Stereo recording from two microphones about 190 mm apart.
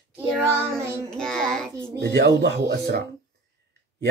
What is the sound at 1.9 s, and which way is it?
Mantra, 60° right (ahead or behind).